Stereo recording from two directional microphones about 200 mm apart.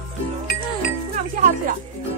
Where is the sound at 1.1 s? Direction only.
40° right (ahead or behind).